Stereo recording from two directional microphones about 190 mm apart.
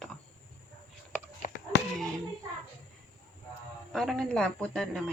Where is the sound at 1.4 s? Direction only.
45° left (ahead or behind).